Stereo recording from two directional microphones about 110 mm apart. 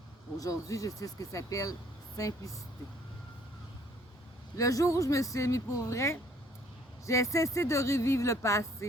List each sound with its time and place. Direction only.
0.3 s speech: 30° left (ahead or behind)
4.5 s speech: 30° left (ahead or behind)